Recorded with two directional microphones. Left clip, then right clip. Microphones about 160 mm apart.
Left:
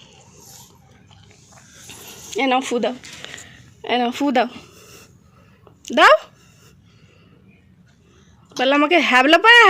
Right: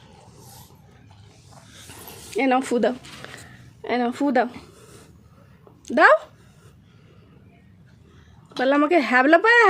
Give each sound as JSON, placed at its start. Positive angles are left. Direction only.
{"t": 2.3, "sound": "speech", "side_deg": -20}
{"t": 2.6, "sound": "speech", "side_deg": -35}
{"t": 3.2, "sound": "a sound", "side_deg": -10}
{"t": 5.8, "sound": "speech", "side_deg": 0}
{"t": 8.5, "sound": "speech", "side_deg": -5}